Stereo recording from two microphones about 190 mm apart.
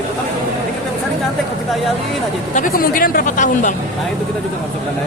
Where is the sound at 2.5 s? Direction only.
45° left (ahead or behind).